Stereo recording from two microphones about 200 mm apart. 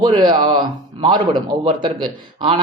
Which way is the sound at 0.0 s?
25° right (ahead or behind).